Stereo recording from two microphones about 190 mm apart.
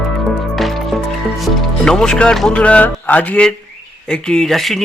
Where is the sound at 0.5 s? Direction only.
Centre (ahead or behind).